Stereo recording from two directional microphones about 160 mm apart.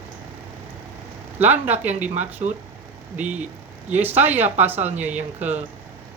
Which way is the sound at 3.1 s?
10° right (ahead or behind).